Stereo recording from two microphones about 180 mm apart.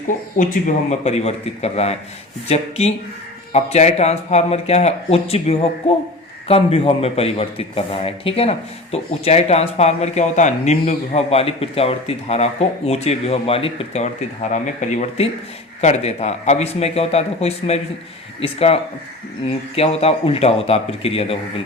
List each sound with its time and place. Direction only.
0.3 s speech: 40° left (ahead or behind)